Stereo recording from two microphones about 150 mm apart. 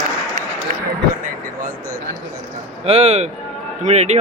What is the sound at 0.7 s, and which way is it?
Speech, 55° right (ahead or behind).